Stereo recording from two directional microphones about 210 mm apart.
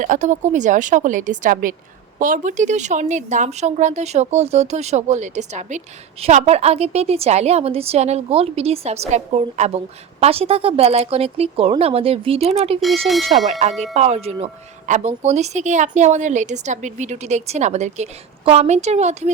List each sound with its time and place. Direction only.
0.0 s a woman's voice: 35° right (ahead or behind)
13.1 s speech: centre (ahead or behind)
13.5 s speech: 30° right (ahead or behind)